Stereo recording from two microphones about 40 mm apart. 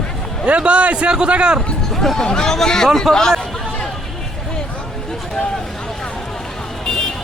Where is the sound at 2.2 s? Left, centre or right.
Centre.